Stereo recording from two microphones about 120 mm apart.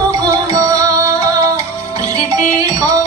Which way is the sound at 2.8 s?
30° right (ahead or behind).